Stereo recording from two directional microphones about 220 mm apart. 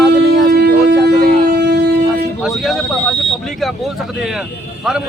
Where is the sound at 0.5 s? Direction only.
50° right (ahead or behind).